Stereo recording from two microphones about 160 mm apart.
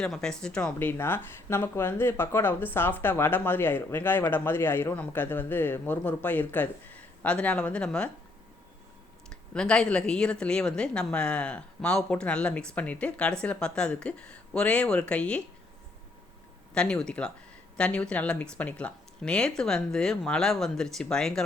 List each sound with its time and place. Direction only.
0.0 s speech: 5° left (ahead or behind)
9.3 s speech: 5° left (ahead or behind)
16.7 s speech: 5° left (ahead or behind)